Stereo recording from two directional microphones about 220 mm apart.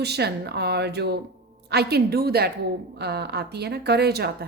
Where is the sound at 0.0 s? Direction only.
50° right (ahead or behind).